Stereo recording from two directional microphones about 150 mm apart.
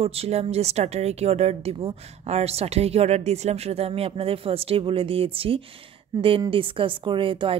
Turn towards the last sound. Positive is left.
turn(degrees=-35)  # may be behind; listen again after turning